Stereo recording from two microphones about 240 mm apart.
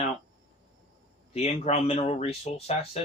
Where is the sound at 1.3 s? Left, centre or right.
Left.